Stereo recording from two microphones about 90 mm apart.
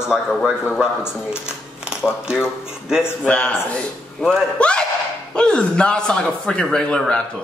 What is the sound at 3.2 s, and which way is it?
A man's voice, 15° left (ahead or behind).